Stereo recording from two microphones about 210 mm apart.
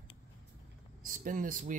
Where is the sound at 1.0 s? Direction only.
40° right (ahead or behind).